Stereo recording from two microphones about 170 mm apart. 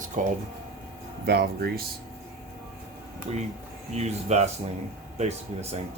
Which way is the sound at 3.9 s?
40° right (ahead or behind).